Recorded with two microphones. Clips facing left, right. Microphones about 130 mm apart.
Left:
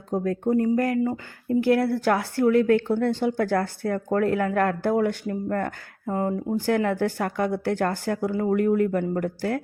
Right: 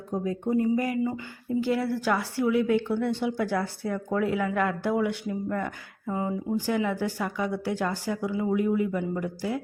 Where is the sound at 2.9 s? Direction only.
55° left (ahead or behind).